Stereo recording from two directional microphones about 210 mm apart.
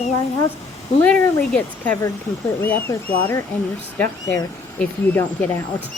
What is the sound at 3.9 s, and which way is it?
Speech, 15° left (ahead or behind).